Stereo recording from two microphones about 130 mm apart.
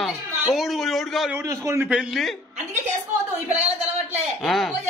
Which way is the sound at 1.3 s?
20° right (ahead or behind).